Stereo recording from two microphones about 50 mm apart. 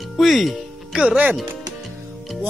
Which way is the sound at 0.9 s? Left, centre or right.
Right.